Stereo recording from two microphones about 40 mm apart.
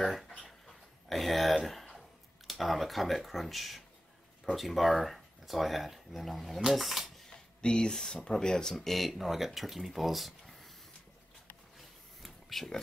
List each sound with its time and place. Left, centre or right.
0.0 s speech: centre
0.7 s a sound: centre
4.6 s speech: centre
7.6 s speech: left
8.7 s speech: centre
12.2 s a sound: centre